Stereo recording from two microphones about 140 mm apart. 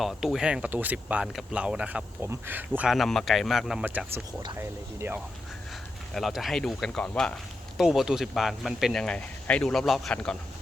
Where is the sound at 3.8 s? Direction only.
15° right (ahead or behind).